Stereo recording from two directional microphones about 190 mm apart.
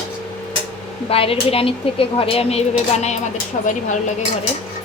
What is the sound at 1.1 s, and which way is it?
Speech, 30° left (ahead or behind).